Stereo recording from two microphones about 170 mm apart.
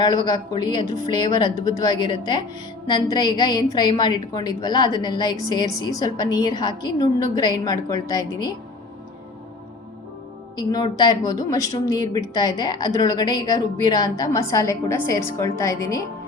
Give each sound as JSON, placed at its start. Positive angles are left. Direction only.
{"t": 0.0, "sound": "a woman's voice", "side_deg": 25}
{"t": 10.6, "sound": "a woman's voice", "side_deg": 25}